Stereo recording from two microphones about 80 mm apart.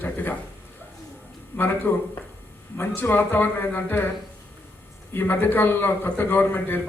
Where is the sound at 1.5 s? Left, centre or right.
Left.